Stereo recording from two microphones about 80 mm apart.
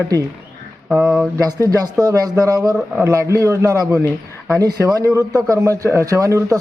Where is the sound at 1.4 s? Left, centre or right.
Right.